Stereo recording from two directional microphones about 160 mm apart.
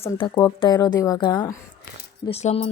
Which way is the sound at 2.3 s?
40° left (ahead or behind).